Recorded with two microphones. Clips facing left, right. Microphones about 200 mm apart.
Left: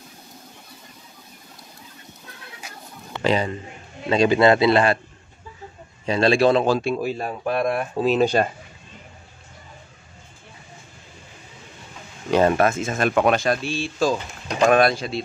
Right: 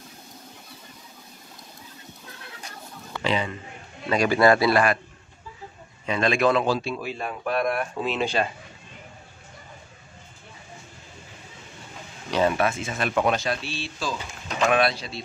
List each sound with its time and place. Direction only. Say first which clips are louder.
3.2 s a man's voice: left 5 dB; 40° left (ahead or behind)
4.1 s a man's voice: left 3 dB; 25° left (ahead or behind)
6.0 s a man's voice: left 5 dB; 30° left (ahead or behind)
6.7 s speech: left 5 dB; 50° left (ahead or behind)
7.4 s a man's voice: left 2 dB; 25° left (ahead or behind)
8.0 s a man's voice: left 9 dB; 40° left (ahead or behind)
12.3 s speech: left 5 dB; 50° left (ahead or behind)
13.2 s speech: left 4 dB; 55° left (ahead or behind)